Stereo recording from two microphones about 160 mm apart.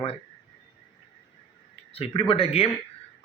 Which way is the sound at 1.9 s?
35° left (ahead or behind).